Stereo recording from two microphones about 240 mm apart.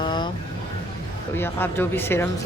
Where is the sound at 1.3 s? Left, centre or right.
Centre.